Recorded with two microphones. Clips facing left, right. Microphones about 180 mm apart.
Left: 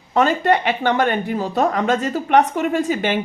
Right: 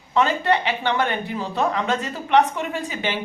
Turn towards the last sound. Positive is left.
turn(degrees=50)  # may be behind; listen again after turning